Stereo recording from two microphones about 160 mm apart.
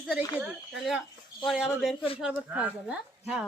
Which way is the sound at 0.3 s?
5° right (ahead or behind).